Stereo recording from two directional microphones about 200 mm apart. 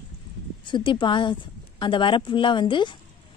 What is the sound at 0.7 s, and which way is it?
A woman's voice, 25° left (ahead or behind).